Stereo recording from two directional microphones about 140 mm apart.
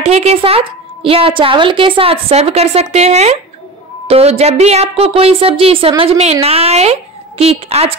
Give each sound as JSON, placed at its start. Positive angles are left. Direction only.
{"t": 0.0, "sound": "a woman's voice", "side_deg": -50}